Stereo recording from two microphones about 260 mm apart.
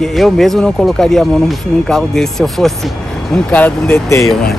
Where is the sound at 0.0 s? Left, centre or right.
Centre.